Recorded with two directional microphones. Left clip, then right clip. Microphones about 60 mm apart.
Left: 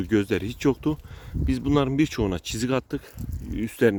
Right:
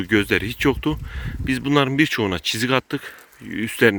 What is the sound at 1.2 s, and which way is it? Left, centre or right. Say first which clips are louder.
Speech: right 4 dB; centre.